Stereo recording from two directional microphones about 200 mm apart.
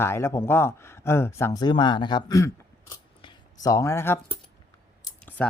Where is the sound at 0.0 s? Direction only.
10° left (ahead or behind).